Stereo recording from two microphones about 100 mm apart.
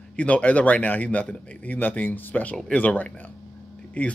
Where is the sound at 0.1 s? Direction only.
15° left (ahead or behind).